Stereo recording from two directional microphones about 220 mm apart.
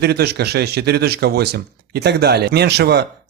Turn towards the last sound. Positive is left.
turn(degrees=-50)  # may be behind; listen again after turning